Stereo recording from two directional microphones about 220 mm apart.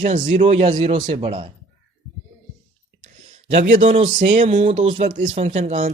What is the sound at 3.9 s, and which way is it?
Speech, 25° right (ahead or behind).